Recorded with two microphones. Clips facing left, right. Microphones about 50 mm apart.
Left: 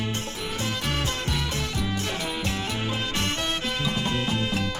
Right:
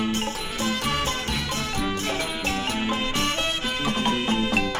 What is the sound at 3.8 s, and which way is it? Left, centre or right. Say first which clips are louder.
Music: right 6 dB; right.